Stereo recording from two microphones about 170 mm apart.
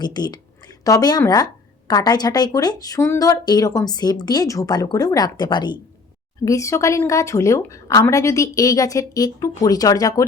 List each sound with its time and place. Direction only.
0.0 s speech: 25° left (ahead or behind)